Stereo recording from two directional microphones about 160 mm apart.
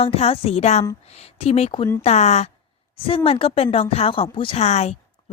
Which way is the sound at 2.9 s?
35° left (ahead or behind).